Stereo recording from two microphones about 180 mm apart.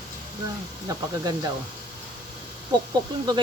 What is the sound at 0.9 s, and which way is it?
Speech, 20° right (ahead or behind).